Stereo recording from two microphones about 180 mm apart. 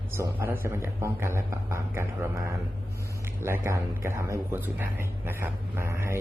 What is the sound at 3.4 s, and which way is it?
A man's voice, 15° right (ahead or behind).